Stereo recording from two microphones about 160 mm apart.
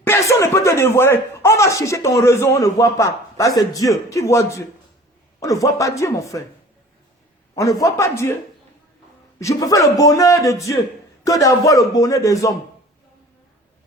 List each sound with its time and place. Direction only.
0.0 s speech: 15° left (ahead or behind)
7.5 s speech: 20° left (ahead or behind)
9.4 s speech: 20° left (ahead or behind)